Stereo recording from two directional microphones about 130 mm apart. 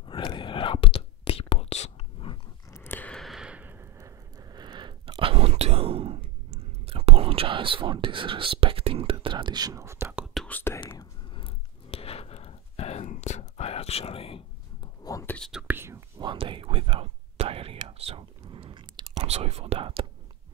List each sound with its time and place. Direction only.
0.0 s whispering: 40° left (ahead or behind)
2.7 s a sound: 15° left (ahead or behind)
3.2 s a sound: centre (ahead or behind); by 10.1 s 20° right (ahead or behind)
10.4 s whispering: 15° left (ahead or behind)
11.0 s a sound: 45° left (ahead or behind)
15.2 s whispering: 10° left (ahead or behind)
15.5 s whispering: 15° right (ahead or behind)
16.2 s whispering: 40° right (ahead or behind)
19.2 s whispering: 55° right (ahead or behind)